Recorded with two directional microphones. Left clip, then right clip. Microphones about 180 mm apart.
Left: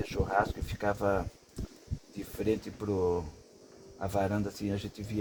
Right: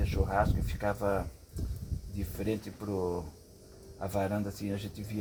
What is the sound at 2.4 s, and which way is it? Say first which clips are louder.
Speech: left 4 dB; 55° left (ahead or behind).